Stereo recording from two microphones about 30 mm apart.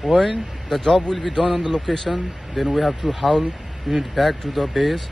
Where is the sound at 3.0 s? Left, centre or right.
Right.